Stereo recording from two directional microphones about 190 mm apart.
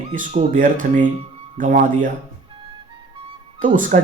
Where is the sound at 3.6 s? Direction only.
45° right (ahead or behind).